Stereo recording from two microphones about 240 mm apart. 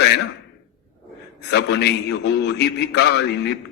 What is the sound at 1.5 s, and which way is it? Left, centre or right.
A man's voice, left.